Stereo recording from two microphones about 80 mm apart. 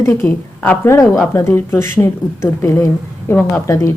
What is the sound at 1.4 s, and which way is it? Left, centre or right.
Speech, left.